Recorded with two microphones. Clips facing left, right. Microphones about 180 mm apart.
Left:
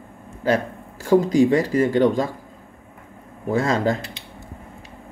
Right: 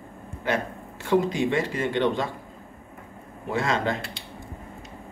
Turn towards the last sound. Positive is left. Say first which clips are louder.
# left 5 dB
turn(degrees=40)  # may be behind; listen again after turning